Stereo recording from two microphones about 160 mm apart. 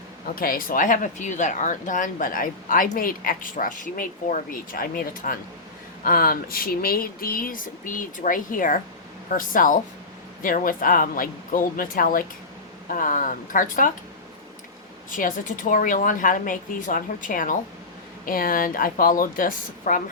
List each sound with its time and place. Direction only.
0.3 s speech: 65° left (ahead or behind)
15.1 s speech: 55° left (ahead or behind)